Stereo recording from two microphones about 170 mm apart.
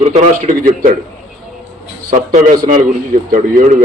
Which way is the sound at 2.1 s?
50° right (ahead or behind).